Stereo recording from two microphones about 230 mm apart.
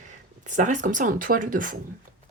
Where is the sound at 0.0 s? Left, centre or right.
Right.